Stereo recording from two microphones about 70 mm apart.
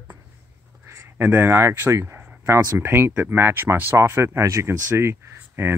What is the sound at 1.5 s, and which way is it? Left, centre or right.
Speech, right.